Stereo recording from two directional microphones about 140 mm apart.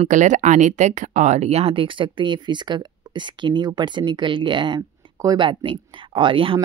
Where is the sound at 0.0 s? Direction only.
60° right (ahead or behind).